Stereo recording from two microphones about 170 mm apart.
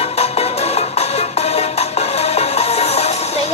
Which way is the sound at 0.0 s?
40° left (ahead or behind).